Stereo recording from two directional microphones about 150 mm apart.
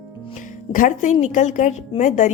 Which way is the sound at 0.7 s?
60° left (ahead or behind).